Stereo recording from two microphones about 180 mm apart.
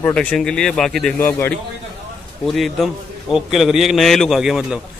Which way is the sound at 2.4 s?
Centre (ahead or behind).